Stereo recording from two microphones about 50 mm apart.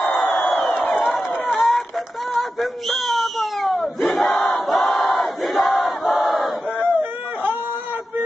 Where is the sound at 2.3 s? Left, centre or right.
Centre.